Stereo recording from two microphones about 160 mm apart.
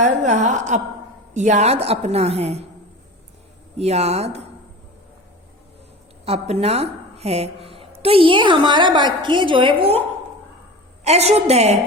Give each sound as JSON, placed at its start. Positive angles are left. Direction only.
{"t": 0.0, "sound": "a woman's voice", "side_deg": -50}
{"t": 3.8, "sound": "a woman's voice", "side_deg": -40}
{"t": 6.2, "sound": "a woman's voice", "side_deg": -40}
{"t": 11.0, "sound": "a woman's voice", "side_deg": -40}